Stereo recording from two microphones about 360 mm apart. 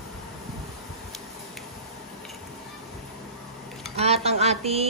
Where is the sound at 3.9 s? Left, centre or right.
Centre.